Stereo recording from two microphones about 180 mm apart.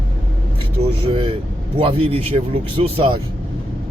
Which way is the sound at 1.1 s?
30° right (ahead or behind).